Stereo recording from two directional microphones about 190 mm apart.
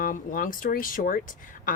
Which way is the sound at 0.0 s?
45° left (ahead or behind).